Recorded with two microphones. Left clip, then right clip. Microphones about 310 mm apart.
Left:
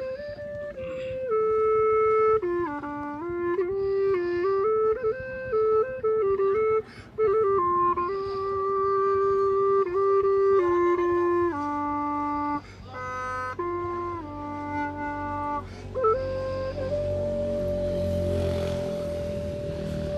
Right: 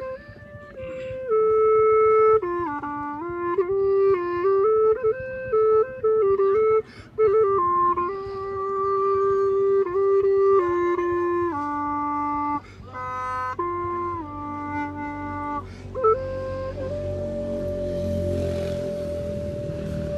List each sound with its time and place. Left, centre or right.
1.3 s music: centre
16.0 s music: centre
17.8 s music: centre
18.4 s music: centre